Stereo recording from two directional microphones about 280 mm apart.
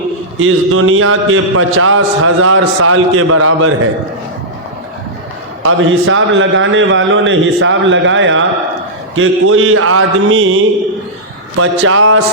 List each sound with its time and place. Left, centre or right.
0.3 s a man's voice: right
5.6 s a man's voice: right